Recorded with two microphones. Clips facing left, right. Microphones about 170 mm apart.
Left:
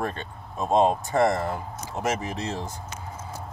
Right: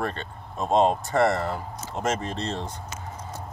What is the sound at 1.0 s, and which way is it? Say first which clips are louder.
Speech: even; 15° left (ahead or behind).